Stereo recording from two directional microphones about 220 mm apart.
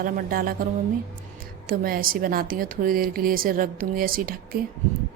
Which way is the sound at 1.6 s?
40° right (ahead or behind).